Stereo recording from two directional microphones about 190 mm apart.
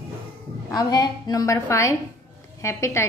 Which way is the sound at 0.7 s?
20° left (ahead or behind).